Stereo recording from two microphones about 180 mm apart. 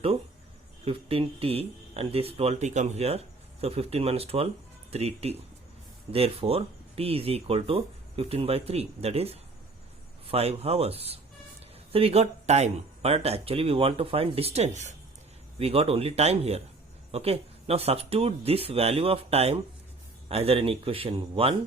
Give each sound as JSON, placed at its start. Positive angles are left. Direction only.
{"t": 0.9, "sound": "speech", "side_deg": -30}